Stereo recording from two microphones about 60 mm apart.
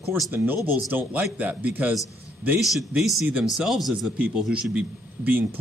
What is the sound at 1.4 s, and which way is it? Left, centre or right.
Speech, right.